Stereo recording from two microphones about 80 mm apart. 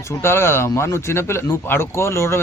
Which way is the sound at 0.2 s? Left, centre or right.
Left.